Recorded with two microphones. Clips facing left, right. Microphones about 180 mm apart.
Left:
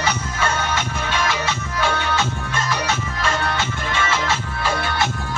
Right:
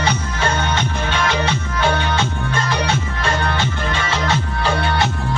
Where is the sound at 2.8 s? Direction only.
35° right (ahead or behind).